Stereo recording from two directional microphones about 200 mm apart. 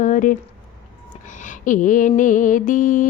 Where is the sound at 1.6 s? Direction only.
40° left (ahead or behind).